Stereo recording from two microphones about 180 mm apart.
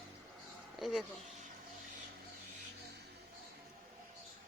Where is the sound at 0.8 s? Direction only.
Centre (ahead or behind).